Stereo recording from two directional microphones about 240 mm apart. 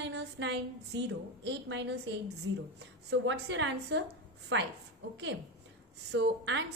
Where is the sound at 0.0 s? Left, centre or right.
Right.